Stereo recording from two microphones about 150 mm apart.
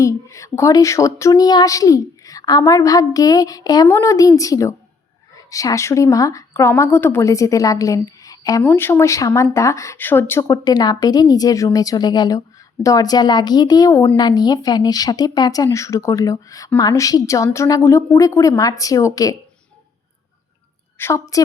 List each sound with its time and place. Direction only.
0.0 s speech: 20° left (ahead or behind)
21.0 s speech: 20° left (ahead or behind)